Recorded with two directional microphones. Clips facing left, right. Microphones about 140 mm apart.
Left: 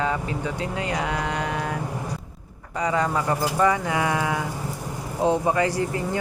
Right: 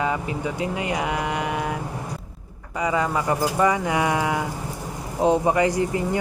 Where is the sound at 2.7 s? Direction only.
5° right (ahead or behind).